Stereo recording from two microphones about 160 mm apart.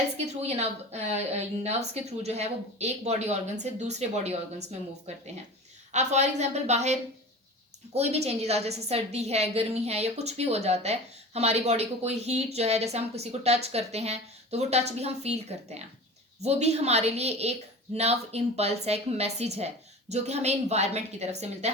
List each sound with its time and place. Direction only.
0.3 s a woman's voice: 40° right (ahead or behind)